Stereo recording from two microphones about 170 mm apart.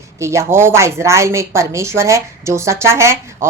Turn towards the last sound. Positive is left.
turn(degrees=-15)  # may be behind; listen again after turning